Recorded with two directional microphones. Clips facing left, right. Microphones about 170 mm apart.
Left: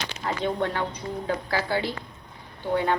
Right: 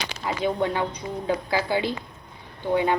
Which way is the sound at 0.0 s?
10° right (ahead or behind).